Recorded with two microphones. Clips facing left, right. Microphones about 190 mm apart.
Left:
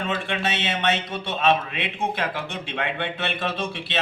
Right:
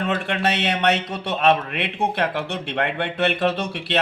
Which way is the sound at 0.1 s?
65° right (ahead or behind).